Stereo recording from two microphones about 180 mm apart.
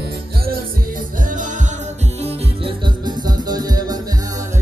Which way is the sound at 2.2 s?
25° right (ahead or behind).